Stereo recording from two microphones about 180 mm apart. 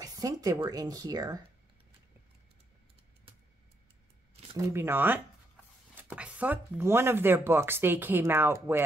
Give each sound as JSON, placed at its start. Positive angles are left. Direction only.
{"t": 0.0, "sound": "speech", "side_deg": -20}
{"t": 4.6, "sound": "speech", "side_deg": -15}